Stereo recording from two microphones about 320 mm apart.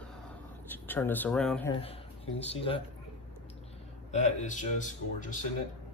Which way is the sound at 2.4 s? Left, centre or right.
Centre.